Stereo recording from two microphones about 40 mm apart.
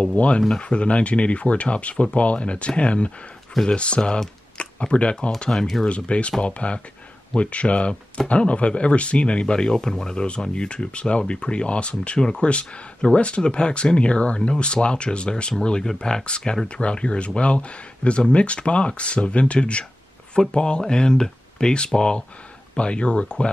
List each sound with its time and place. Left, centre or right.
0.0 s speech: left
5.5 s speech: centre
5.9 s speech: left; by 10.2 s centre
10.2 s speech: left